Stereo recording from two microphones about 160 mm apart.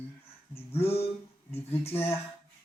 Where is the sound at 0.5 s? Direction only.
40° left (ahead or behind).